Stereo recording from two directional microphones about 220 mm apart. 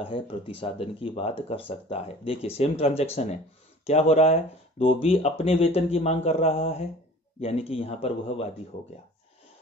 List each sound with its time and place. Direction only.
0.0 s speech: 25° left (ahead or behind)